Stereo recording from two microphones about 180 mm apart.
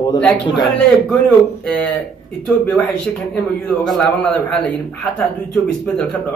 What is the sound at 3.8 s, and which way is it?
Speech, 5° left (ahead or behind).